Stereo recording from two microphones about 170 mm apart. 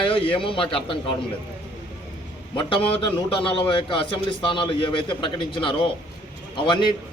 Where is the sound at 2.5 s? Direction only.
30° left (ahead or behind).